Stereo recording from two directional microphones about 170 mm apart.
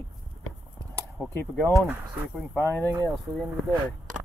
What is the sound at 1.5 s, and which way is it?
Speech, centre (ahead or behind).